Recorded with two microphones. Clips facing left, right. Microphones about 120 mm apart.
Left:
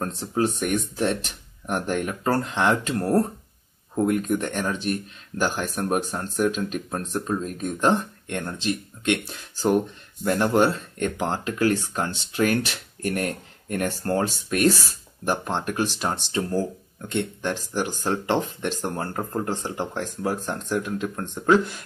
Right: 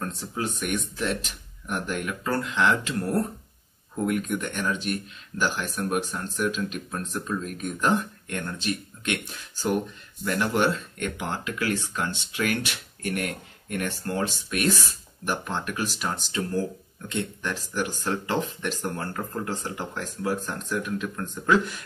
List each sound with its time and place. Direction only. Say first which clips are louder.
0.0 s speech: left 6 dB; 40° left (ahead or behind)
10.2 s speech: left 4 dB; 35° left (ahead or behind)